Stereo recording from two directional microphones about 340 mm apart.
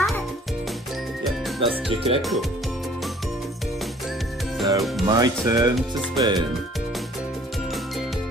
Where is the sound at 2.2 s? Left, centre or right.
Centre.